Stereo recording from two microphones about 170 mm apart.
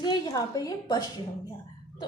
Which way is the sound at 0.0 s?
25° left (ahead or behind).